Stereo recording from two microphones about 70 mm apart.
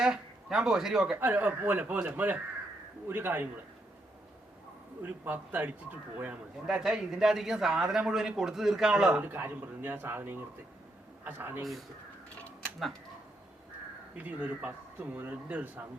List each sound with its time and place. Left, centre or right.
0.0 s speech: centre
1.1 s speech: right
5.0 s speech: right
6.7 s speech: centre
9.2 s a man's voice: right
14.2 s speech: centre